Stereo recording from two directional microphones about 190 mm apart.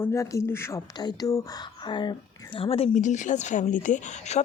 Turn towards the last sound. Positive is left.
turn(degrees=35)  # may be behind; listen again after turning